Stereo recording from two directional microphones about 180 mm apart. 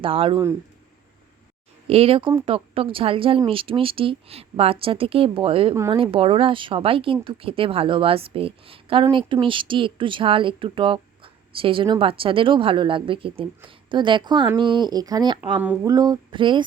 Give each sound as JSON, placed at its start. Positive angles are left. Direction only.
{"t": 0.0, "sound": "speech", "side_deg": -30}
{"t": 1.9, "sound": "speech", "side_deg": -30}
{"t": 5.7, "sound": "speech", "side_deg": -15}
{"t": 6.0, "sound": "speech", "side_deg": -30}
{"t": 15.6, "sound": "speech", "side_deg": -10}
{"t": 15.9, "sound": "speech", "side_deg": -20}